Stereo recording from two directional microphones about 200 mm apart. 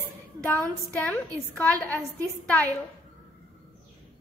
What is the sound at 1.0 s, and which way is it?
Speech, 10° left (ahead or behind).